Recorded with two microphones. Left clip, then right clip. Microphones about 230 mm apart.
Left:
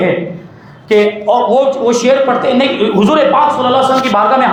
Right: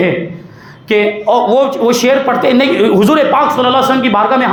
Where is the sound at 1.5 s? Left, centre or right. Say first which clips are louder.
Even; right.